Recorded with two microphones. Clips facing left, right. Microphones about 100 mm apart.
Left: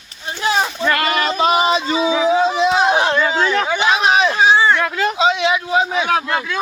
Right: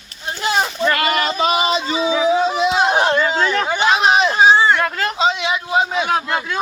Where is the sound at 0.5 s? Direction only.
Centre (ahead or behind).